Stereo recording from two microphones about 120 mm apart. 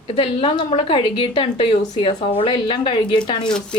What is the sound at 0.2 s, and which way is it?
A woman's voice, 45° left (ahead or behind).